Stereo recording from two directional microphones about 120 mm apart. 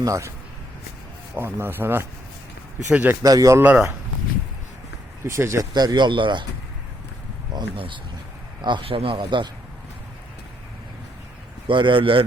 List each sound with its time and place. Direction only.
0.0 s speech: 25° right (ahead or behind)
1.4 s speech: 20° right (ahead or behind)
3.2 s speech: 30° right (ahead or behind)
3.6 s speech: 10° right (ahead or behind)
5.2 s speech: 25° right (ahead or behind)
5.7 s speech: 35° right (ahead or behind)
7.5 s a man's voice: 45° right (ahead or behind)
11.7 s a man's voice: 45° right (ahead or behind)